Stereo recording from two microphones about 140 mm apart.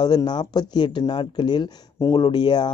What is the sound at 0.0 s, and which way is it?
A man's voice, 30° left (ahead or behind).